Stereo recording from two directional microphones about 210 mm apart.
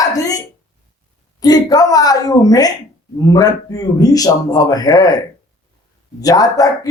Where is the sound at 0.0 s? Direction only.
15° left (ahead or behind).